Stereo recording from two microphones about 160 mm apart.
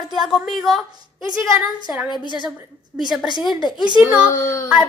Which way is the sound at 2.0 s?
30° left (ahead or behind).